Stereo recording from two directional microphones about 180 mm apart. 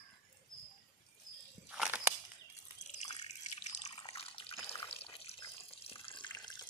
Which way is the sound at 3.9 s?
30° left (ahead or behind).